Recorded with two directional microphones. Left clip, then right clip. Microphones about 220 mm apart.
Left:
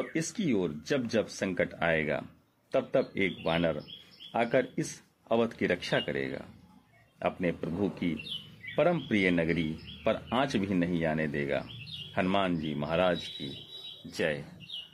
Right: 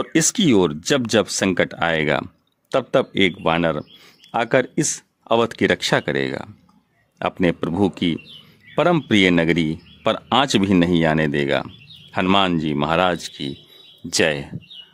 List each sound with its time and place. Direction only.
0.1 s speech: 45° right (ahead or behind)